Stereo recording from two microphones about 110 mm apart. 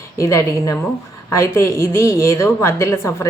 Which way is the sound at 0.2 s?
30° left (ahead or behind).